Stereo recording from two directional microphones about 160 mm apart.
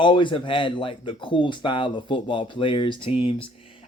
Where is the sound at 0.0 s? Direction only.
30° left (ahead or behind).